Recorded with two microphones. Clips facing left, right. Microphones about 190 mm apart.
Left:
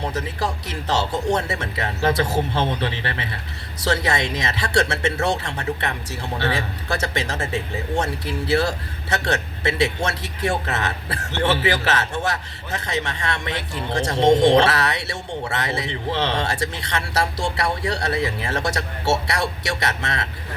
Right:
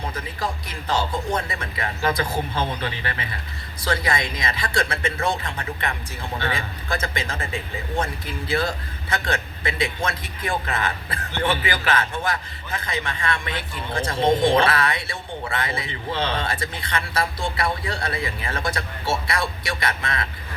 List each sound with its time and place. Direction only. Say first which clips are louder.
0.0 s speech: left 3 dB; 75° left (ahead or behind)
4.0 s speech: left 2 dB; 75° left (ahead or behind)